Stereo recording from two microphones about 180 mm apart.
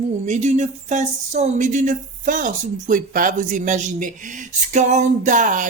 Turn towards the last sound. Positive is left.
turn(degrees=-45)  # may be behind; listen again after turning